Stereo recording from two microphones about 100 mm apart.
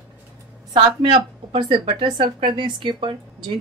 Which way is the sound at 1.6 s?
55° right (ahead or behind).